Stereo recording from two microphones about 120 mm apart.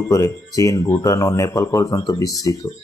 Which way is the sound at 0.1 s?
30° left (ahead or behind).